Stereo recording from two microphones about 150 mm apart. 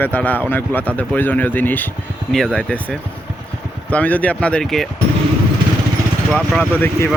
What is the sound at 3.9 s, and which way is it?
Speech, 10° left (ahead or behind).